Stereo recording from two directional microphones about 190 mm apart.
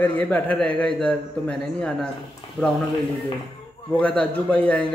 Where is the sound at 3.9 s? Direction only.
5° left (ahead or behind).